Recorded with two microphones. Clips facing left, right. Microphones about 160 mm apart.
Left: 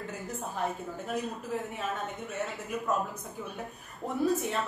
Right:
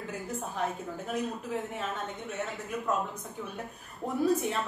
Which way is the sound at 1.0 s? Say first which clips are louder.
Right 1 dB; centre (ahead or behind).